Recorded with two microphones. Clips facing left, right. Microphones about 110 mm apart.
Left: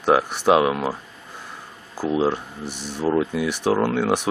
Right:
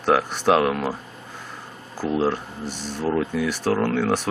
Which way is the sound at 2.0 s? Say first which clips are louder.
Left 1 dB; 5° left (ahead or behind).